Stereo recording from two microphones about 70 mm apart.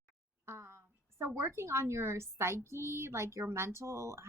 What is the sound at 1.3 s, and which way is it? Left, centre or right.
Speech, right.